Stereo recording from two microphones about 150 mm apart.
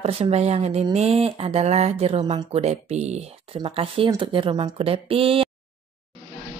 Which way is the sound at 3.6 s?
35° right (ahead or behind).